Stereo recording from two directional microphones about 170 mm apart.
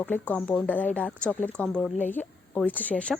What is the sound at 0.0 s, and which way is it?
A woman's voice, 10° left (ahead or behind).